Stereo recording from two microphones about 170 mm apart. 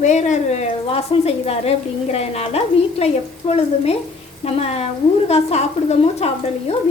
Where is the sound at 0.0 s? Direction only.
45° left (ahead or behind).